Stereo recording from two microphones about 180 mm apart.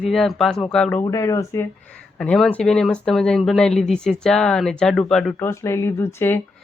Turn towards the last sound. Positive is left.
turn(degrees=15)  # may be behind; listen again after turning